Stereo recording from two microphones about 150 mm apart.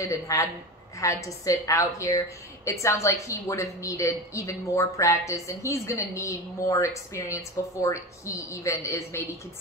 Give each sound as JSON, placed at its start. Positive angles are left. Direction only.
{"t": 0.0, "sound": "a woman's voice", "side_deg": 20}